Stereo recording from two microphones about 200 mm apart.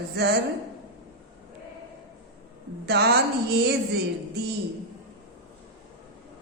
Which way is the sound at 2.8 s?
55° right (ahead or behind).